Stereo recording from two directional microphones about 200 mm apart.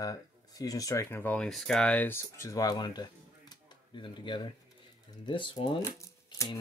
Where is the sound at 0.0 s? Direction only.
15° left (ahead or behind).